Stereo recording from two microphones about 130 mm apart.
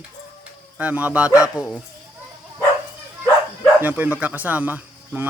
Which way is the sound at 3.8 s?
15° right (ahead or behind).